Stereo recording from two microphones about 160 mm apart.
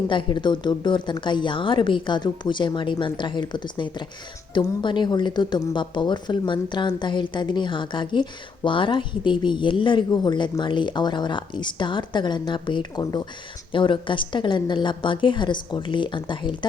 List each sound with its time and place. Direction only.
0.1 s speech: 30° left (ahead or behind)